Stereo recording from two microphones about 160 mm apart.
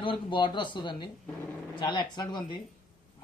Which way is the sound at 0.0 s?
30° left (ahead or behind).